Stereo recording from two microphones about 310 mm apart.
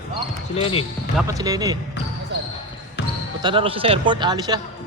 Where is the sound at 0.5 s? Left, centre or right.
Centre.